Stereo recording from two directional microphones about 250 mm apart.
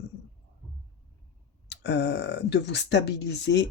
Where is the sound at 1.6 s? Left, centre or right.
Left.